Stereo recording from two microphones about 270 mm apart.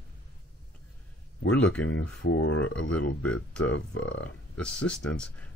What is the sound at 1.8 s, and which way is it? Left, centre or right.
Speech, left.